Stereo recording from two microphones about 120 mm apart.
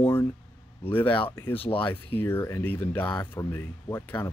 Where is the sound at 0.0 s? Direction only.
15° left (ahead or behind).